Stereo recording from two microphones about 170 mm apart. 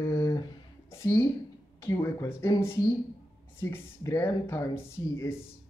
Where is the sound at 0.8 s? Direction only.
15° left (ahead or behind).